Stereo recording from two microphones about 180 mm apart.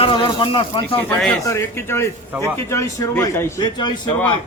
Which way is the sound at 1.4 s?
15° left (ahead or behind).